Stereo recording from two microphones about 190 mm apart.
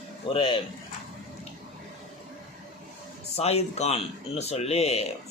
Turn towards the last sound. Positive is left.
turn(degrees=35)  # may be behind; listen again after turning